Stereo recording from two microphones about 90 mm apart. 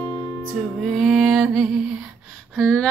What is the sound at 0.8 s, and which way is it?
Music, centre (ahead or behind).